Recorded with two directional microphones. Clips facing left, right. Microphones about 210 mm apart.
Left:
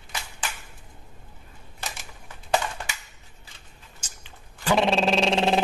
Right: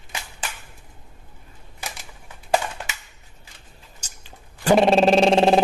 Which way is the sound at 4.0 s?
40° right (ahead or behind).